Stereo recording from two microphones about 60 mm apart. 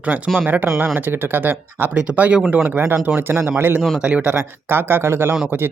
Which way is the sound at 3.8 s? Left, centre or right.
Centre.